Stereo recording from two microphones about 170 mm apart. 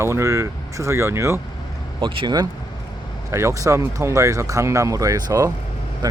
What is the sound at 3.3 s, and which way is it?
Speech, 15° right (ahead or behind).